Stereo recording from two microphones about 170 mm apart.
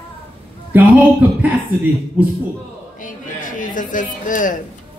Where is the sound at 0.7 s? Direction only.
10° right (ahead or behind).